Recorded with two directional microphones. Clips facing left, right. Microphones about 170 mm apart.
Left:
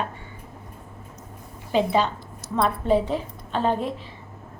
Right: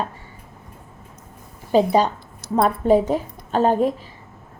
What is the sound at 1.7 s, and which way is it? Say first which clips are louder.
A woman's voice: right 5 dB; 40° right (ahead or behind).